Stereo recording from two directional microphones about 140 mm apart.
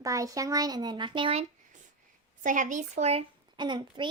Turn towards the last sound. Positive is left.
turn(degrees=-35)  # may be behind; listen again after turning